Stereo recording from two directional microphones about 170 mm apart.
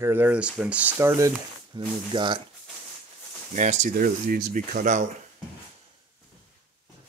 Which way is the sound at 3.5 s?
50° right (ahead or behind).